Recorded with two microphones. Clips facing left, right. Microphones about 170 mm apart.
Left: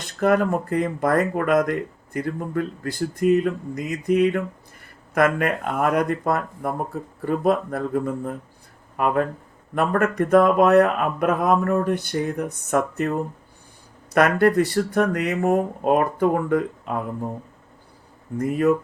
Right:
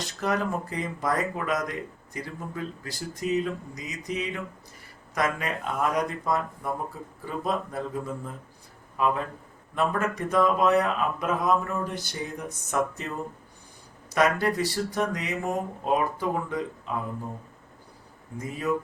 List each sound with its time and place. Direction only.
0.0 s speech: 55° left (ahead or behind)
18.3 s speech: 60° left (ahead or behind)